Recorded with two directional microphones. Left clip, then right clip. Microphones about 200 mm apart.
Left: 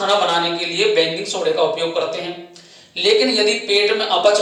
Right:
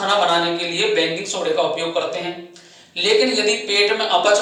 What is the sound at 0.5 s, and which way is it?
Speech, 5° left (ahead or behind).